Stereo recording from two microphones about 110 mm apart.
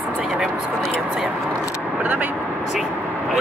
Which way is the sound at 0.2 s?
10° right (ahead or behind).